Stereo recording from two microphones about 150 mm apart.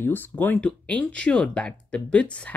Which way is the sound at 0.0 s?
15° left (ahead or behind).